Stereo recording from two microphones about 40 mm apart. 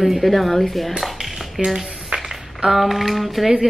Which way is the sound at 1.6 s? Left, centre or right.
Centre.